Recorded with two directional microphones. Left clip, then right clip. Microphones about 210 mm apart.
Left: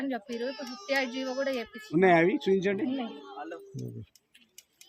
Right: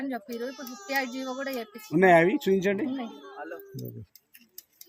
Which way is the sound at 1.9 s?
50° right (ahead or behind).